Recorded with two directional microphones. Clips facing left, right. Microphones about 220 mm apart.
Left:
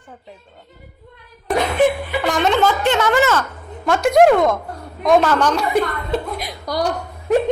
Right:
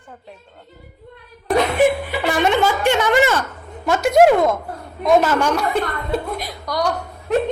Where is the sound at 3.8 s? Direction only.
5° right (ahead or behind).